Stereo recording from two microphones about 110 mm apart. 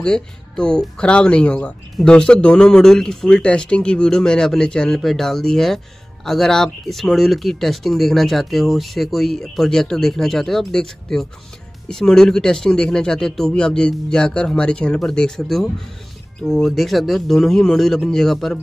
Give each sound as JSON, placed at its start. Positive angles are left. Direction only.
{"t": 0.0, "sound": "a man's voice", "side_deg": 10}